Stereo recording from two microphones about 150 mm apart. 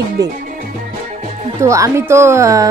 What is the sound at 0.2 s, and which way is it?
Speech, 25° right (ahead or behind).